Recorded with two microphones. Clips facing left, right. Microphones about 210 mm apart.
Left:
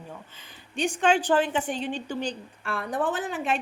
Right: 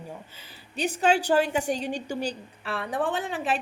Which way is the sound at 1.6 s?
40° right (ahead or behind).